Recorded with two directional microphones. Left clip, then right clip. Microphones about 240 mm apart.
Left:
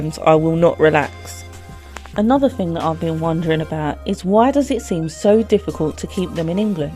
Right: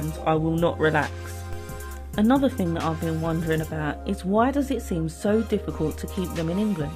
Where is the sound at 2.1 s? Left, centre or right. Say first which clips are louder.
Left 6 dB; centre.